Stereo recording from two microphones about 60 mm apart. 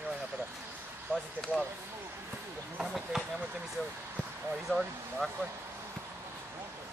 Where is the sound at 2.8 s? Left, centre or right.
Centre.